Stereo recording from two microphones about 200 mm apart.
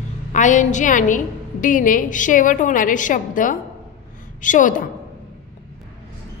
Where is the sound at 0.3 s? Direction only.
40° left (ahead or behind).